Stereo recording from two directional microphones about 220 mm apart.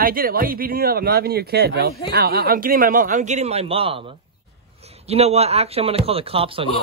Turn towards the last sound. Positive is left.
turn(degrees=-25)  # may be behind; listen again after turning